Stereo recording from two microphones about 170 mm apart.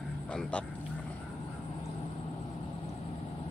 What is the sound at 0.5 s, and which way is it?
Speech, 5° left (ahead or behind).